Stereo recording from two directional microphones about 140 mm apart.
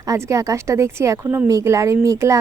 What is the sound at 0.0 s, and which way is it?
A woman's voice, 25° right (ahead or behind).